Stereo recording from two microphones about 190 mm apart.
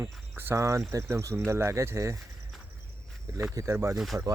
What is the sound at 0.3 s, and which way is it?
Speech, 15° right (ahead or behind).